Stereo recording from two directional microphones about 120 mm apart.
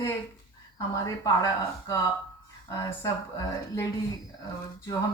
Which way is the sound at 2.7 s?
25° left (ahead or behind).